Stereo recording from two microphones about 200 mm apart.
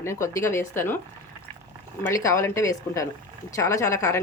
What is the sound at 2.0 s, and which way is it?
Speech, 15° left (ahead or behind).